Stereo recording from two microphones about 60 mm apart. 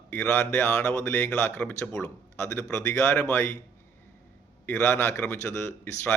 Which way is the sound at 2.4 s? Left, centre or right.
Left.